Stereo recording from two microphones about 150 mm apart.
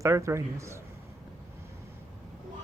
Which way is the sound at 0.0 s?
20° right (ahead or behind).